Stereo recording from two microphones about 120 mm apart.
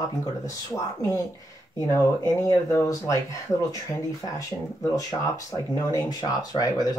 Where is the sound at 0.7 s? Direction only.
25° left (ahead or behind).